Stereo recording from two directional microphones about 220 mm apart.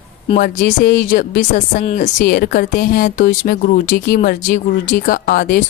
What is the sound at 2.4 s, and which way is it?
Speech, 45° left (ahead or behind).